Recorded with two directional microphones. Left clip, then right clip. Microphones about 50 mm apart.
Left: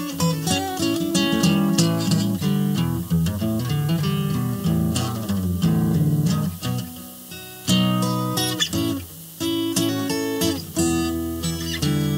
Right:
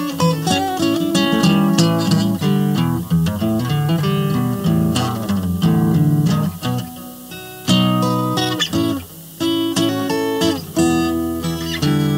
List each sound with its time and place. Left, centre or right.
0.4 s music: centre
3.3 s music: centre
3.5 s music: centre
6.4 s music: centre